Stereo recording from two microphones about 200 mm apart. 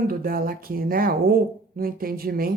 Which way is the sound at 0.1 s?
45° right (ahead or behind).